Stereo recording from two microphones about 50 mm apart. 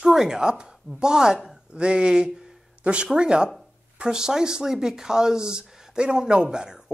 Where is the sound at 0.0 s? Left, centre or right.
Centre.